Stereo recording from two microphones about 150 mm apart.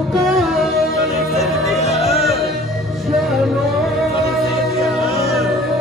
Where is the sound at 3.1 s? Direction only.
Centre (ahead or behind).